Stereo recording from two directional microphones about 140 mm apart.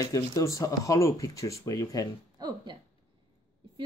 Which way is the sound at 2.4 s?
30° right (ahead or behind).